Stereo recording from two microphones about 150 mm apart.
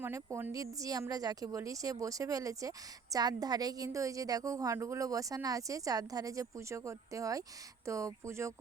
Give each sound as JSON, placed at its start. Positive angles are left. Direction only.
{"t": 0.0, "sound": "speech", "side_deg": -20}